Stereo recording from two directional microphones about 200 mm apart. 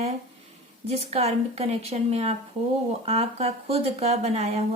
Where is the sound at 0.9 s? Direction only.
30° right (ahead or behind).